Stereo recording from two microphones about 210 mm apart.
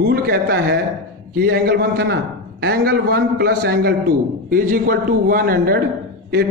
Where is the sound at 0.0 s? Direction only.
45° right (ahead or behind).